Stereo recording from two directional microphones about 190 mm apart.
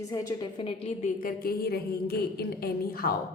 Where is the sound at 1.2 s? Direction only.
50° left (ahead or behind).